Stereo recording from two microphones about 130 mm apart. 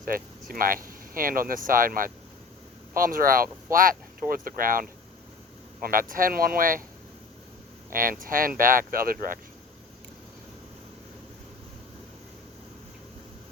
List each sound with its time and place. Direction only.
0.0 s speech: 90° right
5.9 s speech: 90° right
7.9 s speech: 90° right